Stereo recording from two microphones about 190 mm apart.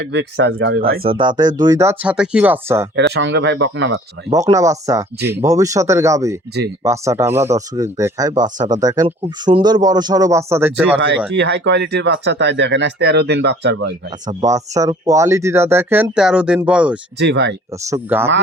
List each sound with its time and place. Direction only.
0.0 s speech: 65° right (ahead or behind)
1.0 s speech: 25° right (ahead or behind); by 2.8 s 10° right (ahead or behind)
2.9 s speech: 70° right (ahead or behind)
4.3 s speech: 15° right (ahead or behind)
11.3 s speech: 65° right (ahead or behind)
14.3 s speech: 20° right (ahead or behind)
17.2 s speech: 65° right (ahead or behind)
17.8 s speech: 15° right (ahead or behind)